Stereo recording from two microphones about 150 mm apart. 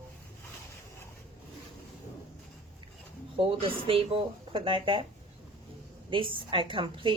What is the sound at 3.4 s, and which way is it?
A woman's voice, 40° right (ahead or behind).